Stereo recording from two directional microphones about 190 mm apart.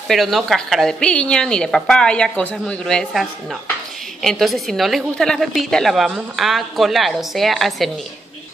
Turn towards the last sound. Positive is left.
turn(degrees=0)  # may be behind; listen again after turning